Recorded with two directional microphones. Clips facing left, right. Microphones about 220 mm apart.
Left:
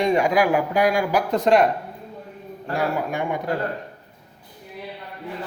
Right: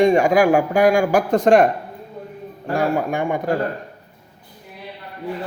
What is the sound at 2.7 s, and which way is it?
Speech, 50° right (ahead or behind).